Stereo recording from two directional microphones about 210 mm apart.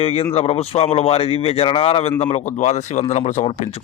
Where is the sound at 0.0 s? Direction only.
30° left (ahead or behind).